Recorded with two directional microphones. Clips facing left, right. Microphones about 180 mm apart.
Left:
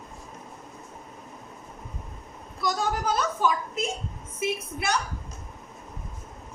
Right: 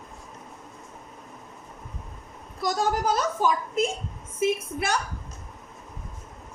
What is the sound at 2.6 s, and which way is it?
A woman's voice, 45° right (ahead or behind).